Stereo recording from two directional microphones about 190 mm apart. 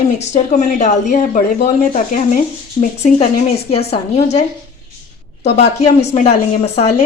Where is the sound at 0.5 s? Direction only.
40° left (ahead or behind).